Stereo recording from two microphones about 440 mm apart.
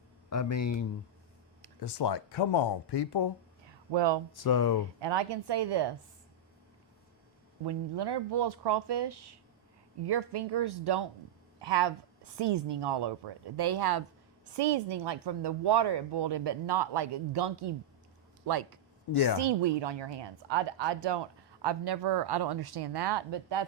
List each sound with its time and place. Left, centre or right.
0.5 s speech: left
1.8 s speech: left
3.9 s speech: right
4.3 s speech: left
4.9 s speech: right
7.6 s speech: right
19.1 s a woman's voice: left
19.4 s speech: right